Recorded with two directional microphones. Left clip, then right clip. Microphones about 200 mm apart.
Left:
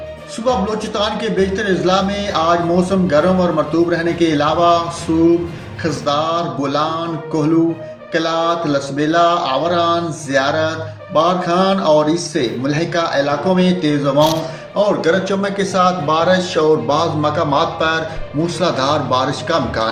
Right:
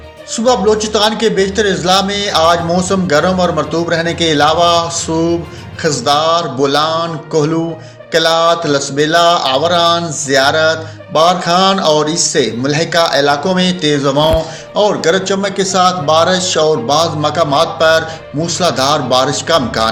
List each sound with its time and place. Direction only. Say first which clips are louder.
0.4 s speech: right 7 dB; 40° right (ahead or behind)
14.8 s a man's voice: right 3 dB; 30° right (ahead or behind)